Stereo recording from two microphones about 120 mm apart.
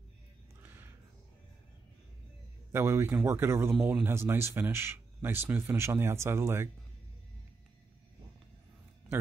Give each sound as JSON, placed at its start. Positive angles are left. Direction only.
{"t": 2.7, "sound": "speech", "side_deg": -20}